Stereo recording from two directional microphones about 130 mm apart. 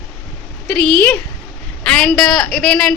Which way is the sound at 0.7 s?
5° left (ahead or behind).